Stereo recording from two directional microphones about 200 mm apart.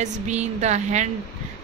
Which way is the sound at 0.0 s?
35° right (ahead or behind).